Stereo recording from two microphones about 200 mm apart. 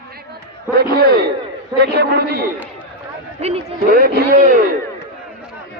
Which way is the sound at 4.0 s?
50° right (ahead or behind).